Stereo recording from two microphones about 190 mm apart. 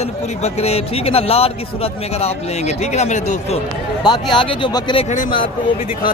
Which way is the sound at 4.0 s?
25° left (ahead or behind).